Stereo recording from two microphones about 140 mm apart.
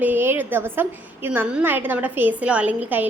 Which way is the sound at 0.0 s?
15° right (ahead or behind).